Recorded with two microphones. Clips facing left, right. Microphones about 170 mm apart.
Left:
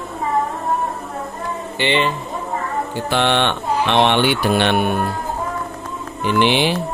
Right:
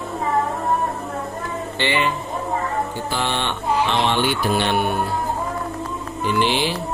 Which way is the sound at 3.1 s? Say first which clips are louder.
Left 6 dB; 70° left (ahead or behind).